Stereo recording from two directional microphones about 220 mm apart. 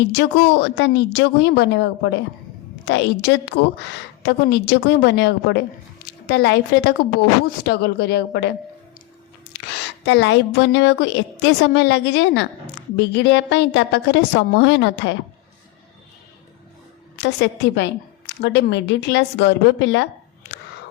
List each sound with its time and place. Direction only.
0.1 s a woman's voice: 55° left (ahead or behind)
17.2 s a woman's voice: 50° left (ahead or behind)